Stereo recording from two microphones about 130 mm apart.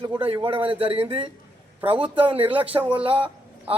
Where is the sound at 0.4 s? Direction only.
40° right (ahead or behind).